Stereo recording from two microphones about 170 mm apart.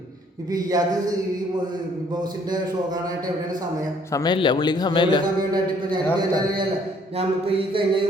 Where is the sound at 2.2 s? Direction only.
25° right (ahead or behind).